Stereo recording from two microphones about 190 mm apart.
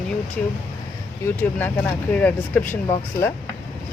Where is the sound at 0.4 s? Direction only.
5° left (ahead or behind).